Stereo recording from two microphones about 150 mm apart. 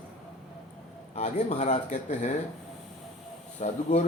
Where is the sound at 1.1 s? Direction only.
50° left (ahead or behind).